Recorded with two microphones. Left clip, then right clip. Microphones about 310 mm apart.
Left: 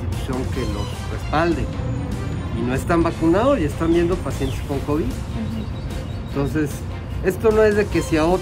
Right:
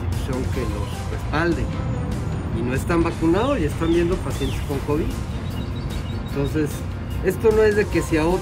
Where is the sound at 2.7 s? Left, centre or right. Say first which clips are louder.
Left 3 dB; centre.